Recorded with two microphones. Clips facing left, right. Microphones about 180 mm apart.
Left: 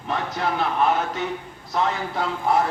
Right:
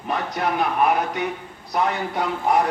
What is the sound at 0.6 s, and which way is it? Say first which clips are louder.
A man's voice: right 1 dB; 15° right (ahead or behind).